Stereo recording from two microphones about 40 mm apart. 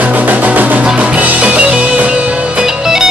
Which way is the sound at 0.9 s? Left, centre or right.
Right.